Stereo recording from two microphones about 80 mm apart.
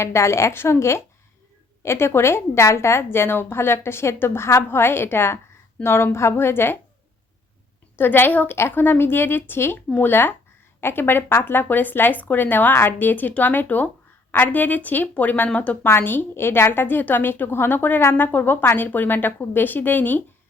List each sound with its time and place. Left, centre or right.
0.0 s a woman's voice: left
7.9 s a woman's voice: left